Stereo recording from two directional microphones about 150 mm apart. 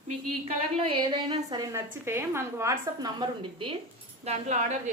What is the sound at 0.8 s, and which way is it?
A woman's voice, 40° right (ahead or behind).